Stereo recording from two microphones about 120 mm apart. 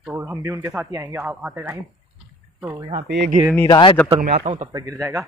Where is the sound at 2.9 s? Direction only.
45° right (ahead or behind).